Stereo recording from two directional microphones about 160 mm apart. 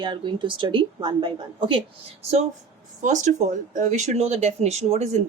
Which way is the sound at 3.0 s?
50° right (ahead or behind).